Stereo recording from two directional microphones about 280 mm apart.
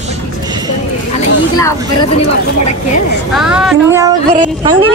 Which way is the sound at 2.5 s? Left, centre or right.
Left.